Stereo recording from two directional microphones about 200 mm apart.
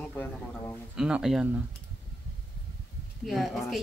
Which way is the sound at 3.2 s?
Centre (ahead or behind).